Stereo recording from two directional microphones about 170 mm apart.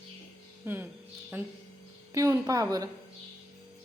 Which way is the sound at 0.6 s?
10° right (ahead or behind).